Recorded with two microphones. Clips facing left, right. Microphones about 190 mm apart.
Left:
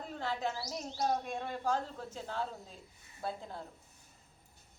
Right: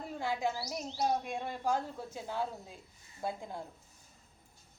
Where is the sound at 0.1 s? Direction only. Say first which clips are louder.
Right 2 dB; 10° right (ahead or behind).